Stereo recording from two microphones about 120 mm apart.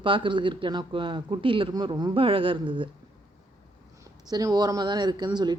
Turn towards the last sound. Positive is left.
turn(degrees=-35)  # may be behind; listen again after turning